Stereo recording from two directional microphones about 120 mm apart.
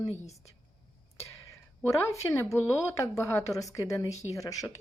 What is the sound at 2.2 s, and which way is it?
A woman's voice, 25° left (ahead or behind).